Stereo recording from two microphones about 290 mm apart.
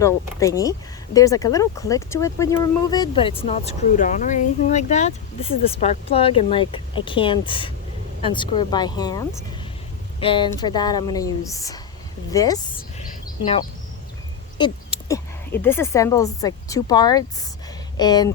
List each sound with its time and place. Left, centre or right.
0.0 s speech: centre